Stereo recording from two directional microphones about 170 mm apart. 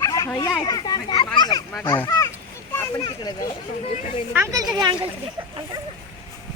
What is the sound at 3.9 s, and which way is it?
Speech, 40° left (ahead or behind).